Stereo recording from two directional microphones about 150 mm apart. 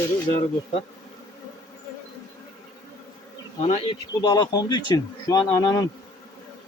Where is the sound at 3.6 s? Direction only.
45° left (ahead or behind).